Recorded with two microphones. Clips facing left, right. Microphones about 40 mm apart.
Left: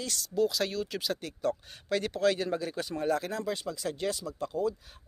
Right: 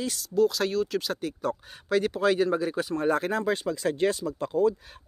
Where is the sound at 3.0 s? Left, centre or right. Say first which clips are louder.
Right 5 dB; right.